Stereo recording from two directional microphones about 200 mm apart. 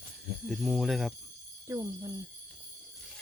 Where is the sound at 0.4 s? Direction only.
Centre (ahead or behind).